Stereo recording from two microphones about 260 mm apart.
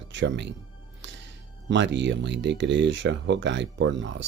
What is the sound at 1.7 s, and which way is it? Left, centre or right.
Speech, right.